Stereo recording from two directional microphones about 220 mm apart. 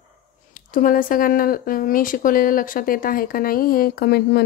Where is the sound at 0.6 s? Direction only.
40° left (ahead or behind).